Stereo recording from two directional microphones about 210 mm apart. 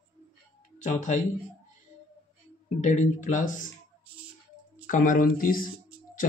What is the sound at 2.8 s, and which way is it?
Speech, 35° left (ahead or behind).